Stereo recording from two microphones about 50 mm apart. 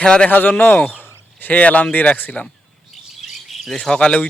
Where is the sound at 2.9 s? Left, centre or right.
Centre.